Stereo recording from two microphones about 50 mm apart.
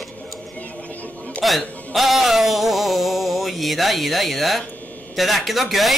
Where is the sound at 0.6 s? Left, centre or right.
Left.